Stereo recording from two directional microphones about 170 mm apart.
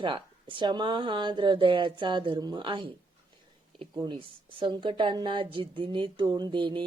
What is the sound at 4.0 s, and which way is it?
Speech, 30° right (ahead or behind).